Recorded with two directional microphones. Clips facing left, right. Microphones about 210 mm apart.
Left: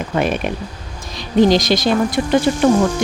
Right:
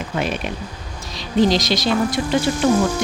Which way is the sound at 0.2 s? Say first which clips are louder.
Left 5 dB; 50° left (ahead or behind).